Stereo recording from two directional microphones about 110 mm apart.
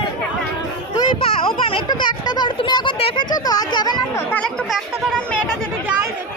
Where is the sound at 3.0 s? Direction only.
60° left (ahead or behind).